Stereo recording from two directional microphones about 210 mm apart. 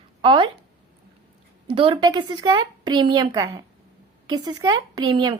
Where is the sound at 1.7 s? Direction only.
25° right (ahead or behind).